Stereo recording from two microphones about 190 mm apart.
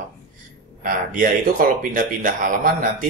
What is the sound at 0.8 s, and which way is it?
Speech, 45° right (ahead or behind).